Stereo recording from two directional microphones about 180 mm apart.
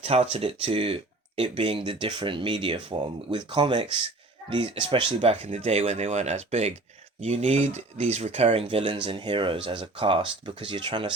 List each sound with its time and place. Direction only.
0.0 s speech: 35° right (ahead or behind)